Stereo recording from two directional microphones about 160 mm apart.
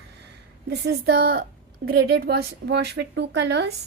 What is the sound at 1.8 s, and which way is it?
A woman's voice, 85° right.